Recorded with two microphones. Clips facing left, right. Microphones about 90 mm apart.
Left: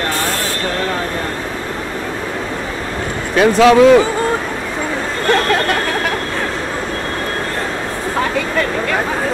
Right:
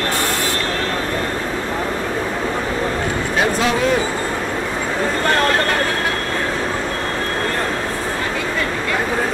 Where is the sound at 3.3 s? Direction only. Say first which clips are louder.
Left 10 dB; 90° left.